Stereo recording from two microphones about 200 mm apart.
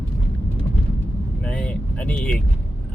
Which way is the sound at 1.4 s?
5° left (ahead or behind).